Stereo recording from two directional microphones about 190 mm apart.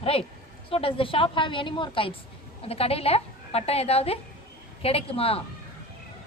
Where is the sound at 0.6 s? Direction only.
30° left (ahead or behind).